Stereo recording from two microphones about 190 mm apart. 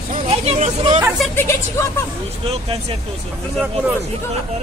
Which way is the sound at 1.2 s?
10° left (ahead or behind).